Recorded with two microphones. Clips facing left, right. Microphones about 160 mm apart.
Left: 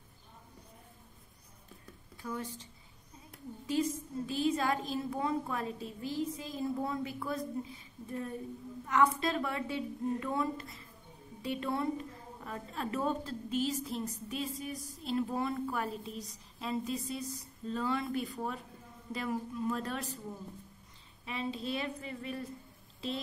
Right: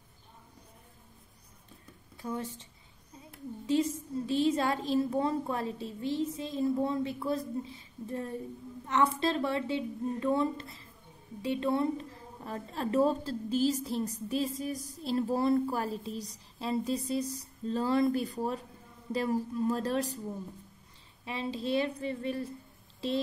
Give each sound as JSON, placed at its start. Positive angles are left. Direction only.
{"t": 2.2, "sound": "a woman's voice", "side_deg": -25}
{"t": 4.3, "sound": "a woman's voice", "side_deg": -30}
{"t": 12.4, "sound": "a woman's voice", "side_deg": -35}
{"t": 21.3, "sound": "a woman's voice", "side_deg": -30}